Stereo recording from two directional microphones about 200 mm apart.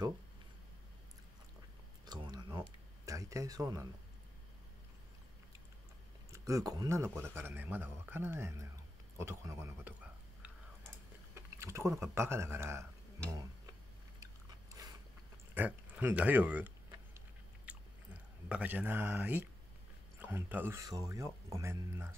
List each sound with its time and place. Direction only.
2.0 s a sound: 20° right (ahead or behind)
3.1 s speech: 15° right (ahead or behind)
6.3 s speech: 15° right (ahead or behind)
11.3 s speech: 15° right (ahead or behind)
14.2 s biting: 15° right (ahead or behind)
15.5 s speech: 10° right (ahead or behind)
17.7 s chewing: 5° right (ahead or behind)
18.5 s speech: 5° right (ahead or behind)